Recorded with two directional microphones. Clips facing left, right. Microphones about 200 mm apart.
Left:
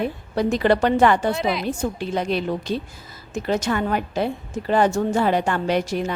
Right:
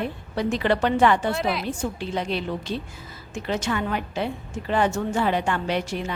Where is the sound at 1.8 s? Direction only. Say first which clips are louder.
Left 3 dB; 45° left (ahead or behind).